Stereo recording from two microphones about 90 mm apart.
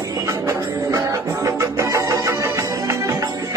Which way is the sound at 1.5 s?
35° right (ahead or behind).